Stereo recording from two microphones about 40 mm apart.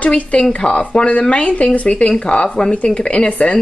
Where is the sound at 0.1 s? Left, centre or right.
Left.